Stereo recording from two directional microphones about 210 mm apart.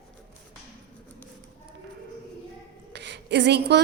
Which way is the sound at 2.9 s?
55° right (ahead or behind).